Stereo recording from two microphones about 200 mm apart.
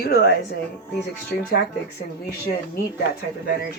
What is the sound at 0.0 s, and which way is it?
Speech, 50° left (ahead or behind).